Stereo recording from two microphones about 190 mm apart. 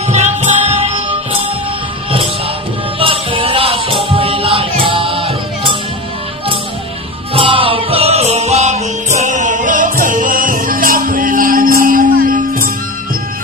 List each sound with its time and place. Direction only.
0.1 s music: 35° right (ahead or behind)
3.0 s music: 30° right (ahead or behind)
7.3 s music: 30° right (ahead or behind); by 12.6 s 45° right (ahead or behind)